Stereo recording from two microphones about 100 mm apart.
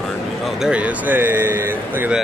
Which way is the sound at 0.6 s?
15° right (ahead or behind).